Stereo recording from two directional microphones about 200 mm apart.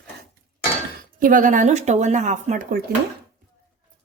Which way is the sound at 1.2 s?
45° right (ahead or behind).